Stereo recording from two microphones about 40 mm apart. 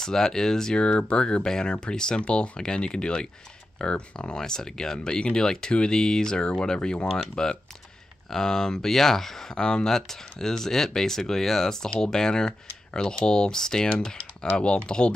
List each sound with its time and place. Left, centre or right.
0.0 s speech: centre